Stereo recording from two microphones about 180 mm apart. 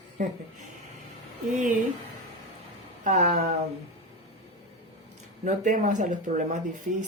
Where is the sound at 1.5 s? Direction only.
45° right (ahead or behind).